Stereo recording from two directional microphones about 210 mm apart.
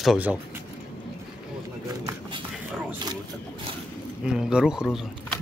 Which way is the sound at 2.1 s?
20° right (ahead or behind).